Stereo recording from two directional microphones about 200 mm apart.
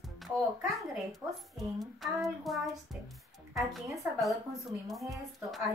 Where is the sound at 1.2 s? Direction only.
15° right (ahead or behind).